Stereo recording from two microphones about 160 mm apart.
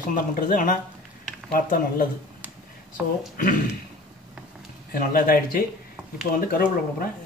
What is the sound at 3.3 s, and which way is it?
Speech, 60° left (ahead or behind).